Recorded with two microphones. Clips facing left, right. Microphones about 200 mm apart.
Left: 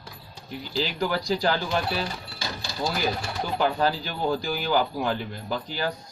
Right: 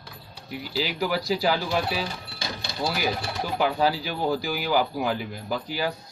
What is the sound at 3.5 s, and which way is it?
A man's voice, 10° right (ahead or behind).